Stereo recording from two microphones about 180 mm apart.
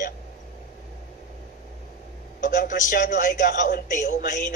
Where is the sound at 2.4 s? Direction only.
50° left (ahead or behind).